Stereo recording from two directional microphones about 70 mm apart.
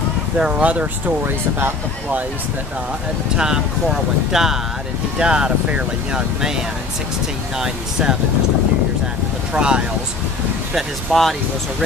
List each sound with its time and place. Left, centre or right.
0.4 s speech: centre
3.3 s speech: centre
9.5 s speech: centre
10.7 s speech: centre